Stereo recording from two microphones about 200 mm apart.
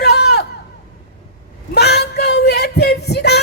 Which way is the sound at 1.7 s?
55° left (ahead or behind).